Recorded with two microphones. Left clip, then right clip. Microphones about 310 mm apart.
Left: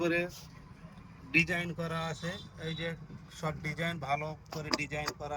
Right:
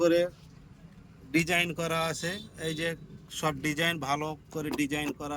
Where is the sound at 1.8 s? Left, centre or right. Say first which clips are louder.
Right 7 dB; right.